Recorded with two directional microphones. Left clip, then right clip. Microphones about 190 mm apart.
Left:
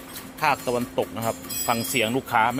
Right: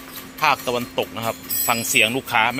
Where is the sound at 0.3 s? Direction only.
5° left (ahead or behind).